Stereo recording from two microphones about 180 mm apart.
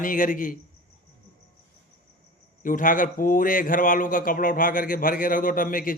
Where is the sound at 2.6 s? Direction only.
50° left (ahead or behind).